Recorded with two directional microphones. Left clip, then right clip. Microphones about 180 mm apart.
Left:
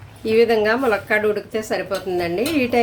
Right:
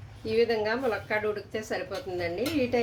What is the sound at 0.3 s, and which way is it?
Speech, 35° left (ahead or behind).